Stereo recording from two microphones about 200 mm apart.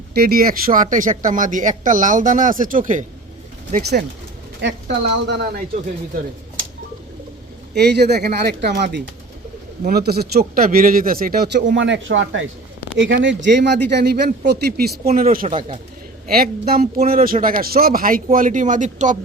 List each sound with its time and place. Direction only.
0.1 s a man's voice: 50° right (ahead or behind)
4.6 s speech: 60° right (ahead or behind)
7.8 s a man's voice: 55° right (ahead or behind)
11.7 s a man's voice: 65° right (ahead or behind); by 19.1 s 40° right (ahead or behind)